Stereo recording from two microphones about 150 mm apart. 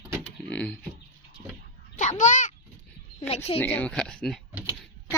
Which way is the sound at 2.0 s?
55° left (ahead or behind).